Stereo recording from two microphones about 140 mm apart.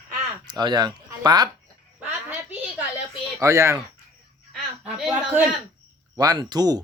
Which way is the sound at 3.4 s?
20° right (ahead or behind).